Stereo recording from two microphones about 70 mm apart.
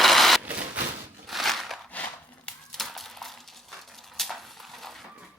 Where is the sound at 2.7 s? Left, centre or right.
Centre.